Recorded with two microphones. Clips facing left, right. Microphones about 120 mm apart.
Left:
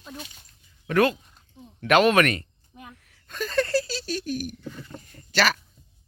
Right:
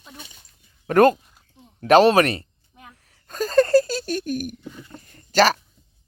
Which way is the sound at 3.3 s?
40° right (ahead or behind).